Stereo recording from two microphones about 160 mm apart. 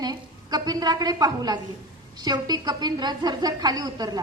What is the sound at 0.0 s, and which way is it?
A woman's voice, 25° right (ahead or behind).